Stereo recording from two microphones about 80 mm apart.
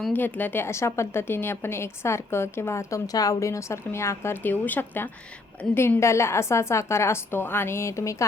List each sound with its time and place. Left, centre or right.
0.1 s a woman's voice: left
6.0 s a woman's voice: left